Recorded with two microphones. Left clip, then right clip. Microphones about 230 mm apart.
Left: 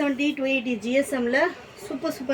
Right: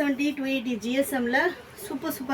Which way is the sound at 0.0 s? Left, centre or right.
Centre.